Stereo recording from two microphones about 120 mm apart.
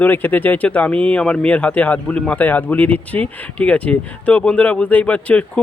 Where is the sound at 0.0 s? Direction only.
15° left (ahead or behind).